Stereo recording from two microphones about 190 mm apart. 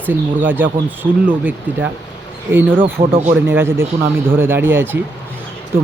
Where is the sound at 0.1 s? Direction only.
10° right (ahead or behind).